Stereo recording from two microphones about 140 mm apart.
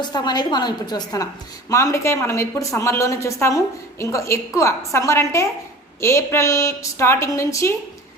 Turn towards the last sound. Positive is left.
turn(degrees=20)  # may be behind; listen again after turning